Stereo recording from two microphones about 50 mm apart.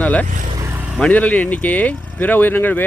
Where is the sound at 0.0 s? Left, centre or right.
Left.